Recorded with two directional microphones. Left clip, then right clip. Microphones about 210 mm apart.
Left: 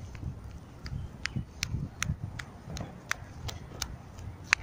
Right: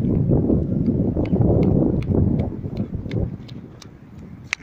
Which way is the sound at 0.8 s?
25° left (ahead or behind).